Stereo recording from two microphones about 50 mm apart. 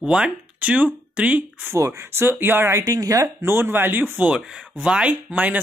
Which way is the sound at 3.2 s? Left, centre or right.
Right.